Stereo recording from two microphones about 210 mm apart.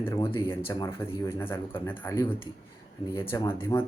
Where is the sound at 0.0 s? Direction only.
10° left (ahead or behind).